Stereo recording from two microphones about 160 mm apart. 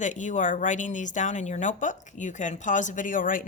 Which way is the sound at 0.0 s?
50° left (ahead or behind).